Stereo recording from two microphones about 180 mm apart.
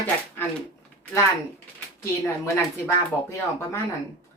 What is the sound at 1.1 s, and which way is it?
Speech, 15° left (ahead or behind).